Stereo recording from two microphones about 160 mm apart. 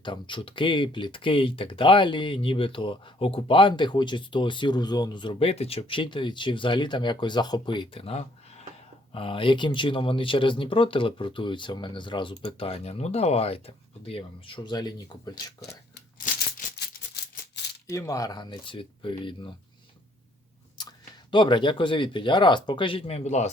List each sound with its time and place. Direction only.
0.0 s speech: 30° left (ahead or behind)
16.2 s music: 60° left (ahead or behind)
17.9 s speech: 20° left (ahead or behind)
20.8 s a sound: 25° left (ahead or behind)
21.2 s speech: 30° left (ahead or behind)